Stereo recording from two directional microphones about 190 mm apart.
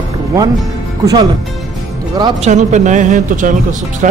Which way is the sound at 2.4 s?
40° right (ahead or behind).